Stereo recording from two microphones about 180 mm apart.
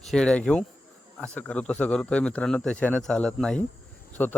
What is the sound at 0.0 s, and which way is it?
Speech, 5° left (ahead or behind).